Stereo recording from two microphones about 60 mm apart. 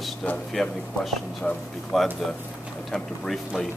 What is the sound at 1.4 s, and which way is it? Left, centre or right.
Speech, centre.